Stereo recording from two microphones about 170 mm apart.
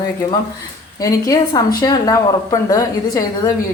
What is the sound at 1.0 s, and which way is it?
A woman's voice, 20° left (ahead or behind).